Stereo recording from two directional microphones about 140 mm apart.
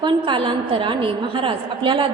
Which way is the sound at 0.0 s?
35° right (ahead or behind).